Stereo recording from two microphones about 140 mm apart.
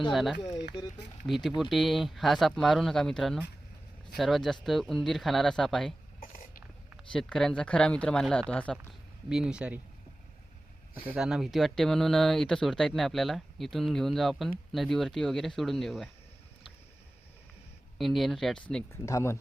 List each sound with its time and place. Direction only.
0.1 s speech: centre (ahead or behind)
1.7 s speech: centre (ahead or behind)
7.1 s speech: 5° left (ahead or behind)
8.9 s speech: 5° right (ahead or behind)
11.1 s speech: 5° right (ahead or behind)
17.9 s speech: centre (ahead or behind)
18.9 s speech: 20° left (ahead or behind)